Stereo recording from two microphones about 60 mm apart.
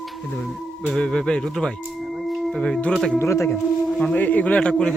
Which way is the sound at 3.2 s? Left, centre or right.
Left.